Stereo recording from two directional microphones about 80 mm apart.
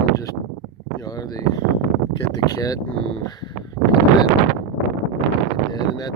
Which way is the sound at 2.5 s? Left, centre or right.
Left.